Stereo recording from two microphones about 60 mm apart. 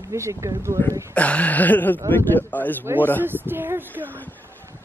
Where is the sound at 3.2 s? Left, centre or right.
Right.